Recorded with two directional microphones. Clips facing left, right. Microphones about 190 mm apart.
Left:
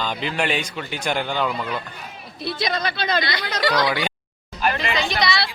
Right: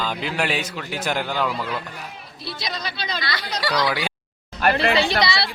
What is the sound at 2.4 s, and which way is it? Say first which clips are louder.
Speech: left 7 dB; 55° left (ahead or behind).